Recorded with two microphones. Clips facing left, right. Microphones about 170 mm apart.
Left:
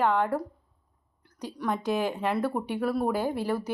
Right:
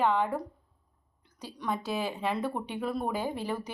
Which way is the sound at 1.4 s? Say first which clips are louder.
Left 3 dB; 15° left (ahead or behind).